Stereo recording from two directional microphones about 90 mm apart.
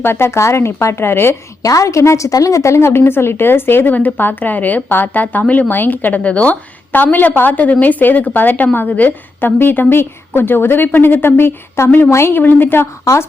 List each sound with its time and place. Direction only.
0.0 s speech: 25° left (ahead or behind)